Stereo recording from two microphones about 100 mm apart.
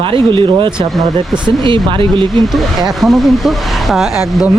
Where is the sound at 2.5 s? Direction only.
Centre (ahead or behind).